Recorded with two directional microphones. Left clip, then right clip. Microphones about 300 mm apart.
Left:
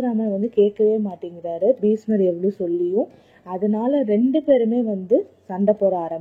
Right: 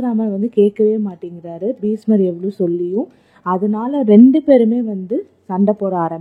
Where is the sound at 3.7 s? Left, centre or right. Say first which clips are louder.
Right 7 dB; centre.